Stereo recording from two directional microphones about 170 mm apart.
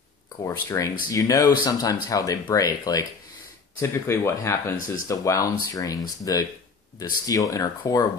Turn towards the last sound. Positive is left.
turn(degrees=20)  # may be behind; listen again after turning